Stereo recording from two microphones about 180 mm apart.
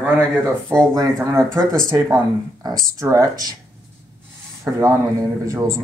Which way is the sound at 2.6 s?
20° right (ahead or behind).